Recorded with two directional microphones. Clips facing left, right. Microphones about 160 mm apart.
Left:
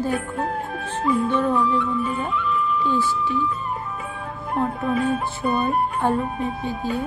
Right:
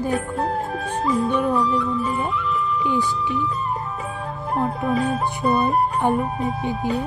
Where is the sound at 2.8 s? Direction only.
15° right (ahead or behind).